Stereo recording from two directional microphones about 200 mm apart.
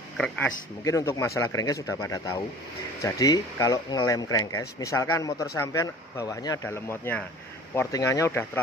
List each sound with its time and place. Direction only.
0.8 s speech: 15° left (ahead or behind)